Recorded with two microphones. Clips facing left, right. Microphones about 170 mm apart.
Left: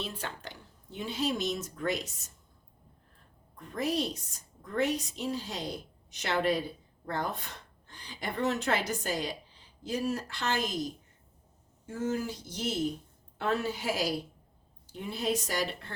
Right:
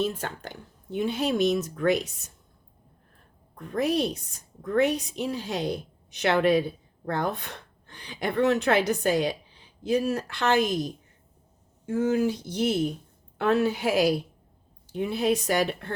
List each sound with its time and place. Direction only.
0.0 s a woman's voice: 45° right (ahead or behind); by 2.0 s 65° right (ahead or behind)
3.6 s a woman's voice: 60° right (ahead or behind)
12.0 s a woman's voice: 70° right (ahead or behind)